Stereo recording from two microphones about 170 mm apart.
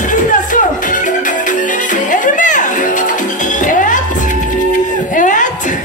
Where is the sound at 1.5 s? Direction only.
50° left (ahead or behind).